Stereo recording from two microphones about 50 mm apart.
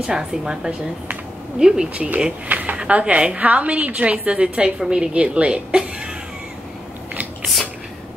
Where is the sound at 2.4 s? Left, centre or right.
Right.